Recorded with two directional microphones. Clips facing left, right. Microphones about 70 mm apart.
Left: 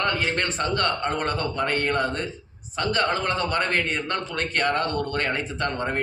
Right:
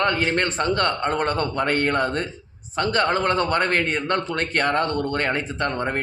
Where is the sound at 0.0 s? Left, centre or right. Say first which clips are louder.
Right 3 dB; right.